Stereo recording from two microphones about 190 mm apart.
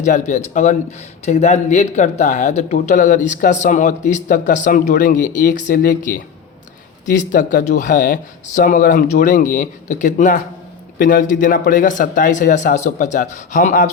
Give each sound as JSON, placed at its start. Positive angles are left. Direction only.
{"t": 0.0, "sound": "speech", "side_deg": 40}